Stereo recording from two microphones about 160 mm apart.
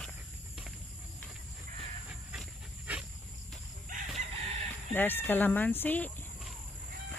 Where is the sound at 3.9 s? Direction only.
55° right (ahead or behind).